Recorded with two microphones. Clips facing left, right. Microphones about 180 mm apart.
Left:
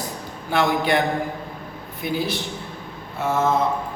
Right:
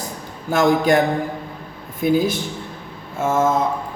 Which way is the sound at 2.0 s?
45° right (ahead or behind).